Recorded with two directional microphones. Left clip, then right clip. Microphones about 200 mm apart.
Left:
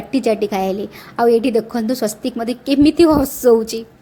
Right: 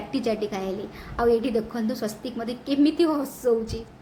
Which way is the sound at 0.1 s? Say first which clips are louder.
Left 10 dB; 35° left (ahead or behind).